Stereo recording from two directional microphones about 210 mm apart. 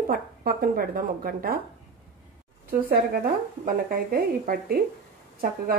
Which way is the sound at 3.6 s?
45° right (ahead or behind).